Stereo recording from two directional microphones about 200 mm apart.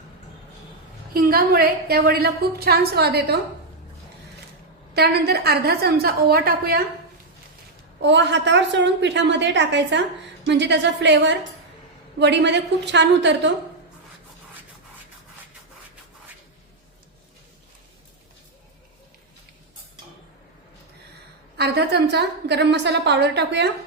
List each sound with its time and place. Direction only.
1.1 s a woman's voice: 45° right (ahead or behind)
4.9 s a woman's voice: 55° right (ahead or behind)
8.0 s a woman's voice: 60° right (ahead or behind)
21.6 s a woman's voice: 55° right (ahead or behind)